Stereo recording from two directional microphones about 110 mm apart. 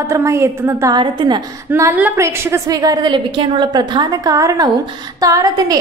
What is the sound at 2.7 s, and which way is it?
A woman's voice, 35° right (ahead or behind).